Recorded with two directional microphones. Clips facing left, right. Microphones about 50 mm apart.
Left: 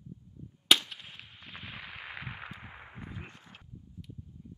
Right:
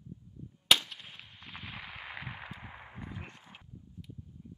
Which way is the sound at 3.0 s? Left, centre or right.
Centre.